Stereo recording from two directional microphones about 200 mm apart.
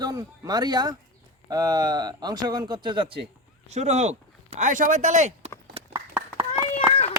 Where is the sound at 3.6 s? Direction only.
35° right (ahead or behind).